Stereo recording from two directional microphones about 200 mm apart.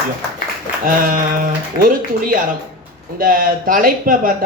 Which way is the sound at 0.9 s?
45° right (ahead or behind).